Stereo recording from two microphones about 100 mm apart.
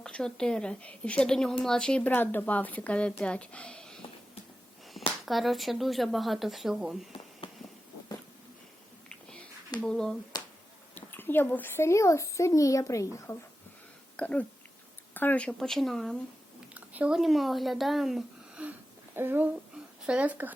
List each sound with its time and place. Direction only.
0.0 s speech: 5° left (ahead or behind)
4.9 s speech: centre (ahead or behind)
7.4 s a sound: 60° left (ahead or behind)
9.0 s whispering: 15° left (ahead or behind)
9.8 s speech: 5° left (ahead or behind)
10.9 s a child's voice: 20° left (ahead or behind)
14.2 s speech: 10° left (ahead or behind)
16.7 s a sound: 15° right (ahead or behind)
17.2 s speech: centre (ahead or behind)
19.1 s speech: 20° right (ahead or behind)
19.7 s a sound: 10° right (ahead or behind)